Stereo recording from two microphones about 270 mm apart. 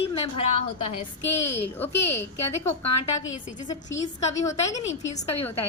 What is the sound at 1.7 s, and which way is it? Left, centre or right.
Speech, centre.